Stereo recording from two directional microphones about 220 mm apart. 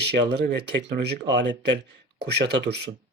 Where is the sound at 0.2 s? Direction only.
50° right (ahead or behind).